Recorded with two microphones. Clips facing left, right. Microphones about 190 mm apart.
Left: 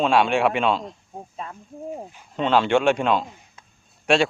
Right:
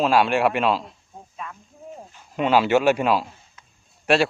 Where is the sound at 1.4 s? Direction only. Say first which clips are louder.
Right 1 dB; 30° left (ahead or behind).